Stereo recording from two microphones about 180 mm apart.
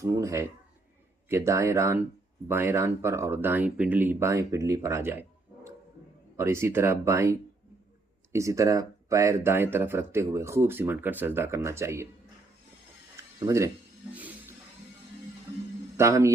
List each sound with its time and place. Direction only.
0.0 s speech: 15° right (ahead or behind)
6.3 s speech: 15° right (ahead or behind)
13.4 s speech: 15° right (ahead or behind)
14.1 s a sound: 10° right (ahead or behind)
16.0 s speech: 15° right (ahead or behind)